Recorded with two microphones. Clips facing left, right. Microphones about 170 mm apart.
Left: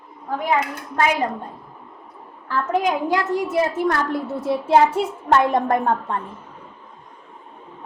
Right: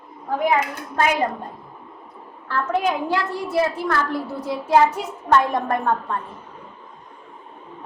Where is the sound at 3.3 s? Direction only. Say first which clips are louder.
Left 2 dB; 15° left (ahead or behind).